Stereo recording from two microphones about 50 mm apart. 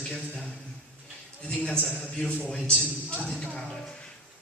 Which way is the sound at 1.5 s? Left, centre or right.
Left.